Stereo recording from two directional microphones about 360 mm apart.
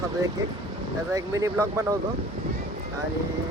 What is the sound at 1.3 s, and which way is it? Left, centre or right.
Speech, centre.